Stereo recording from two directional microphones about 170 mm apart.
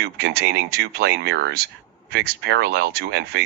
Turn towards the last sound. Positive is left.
turn(degrees=-70)  # may be behind; listen again after turning